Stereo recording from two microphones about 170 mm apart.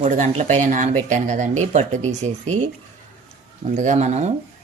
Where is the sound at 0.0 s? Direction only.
40° right (ahead or behind).